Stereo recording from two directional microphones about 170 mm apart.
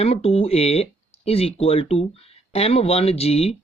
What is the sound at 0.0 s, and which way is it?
Speech, 35° left (ahead or behind).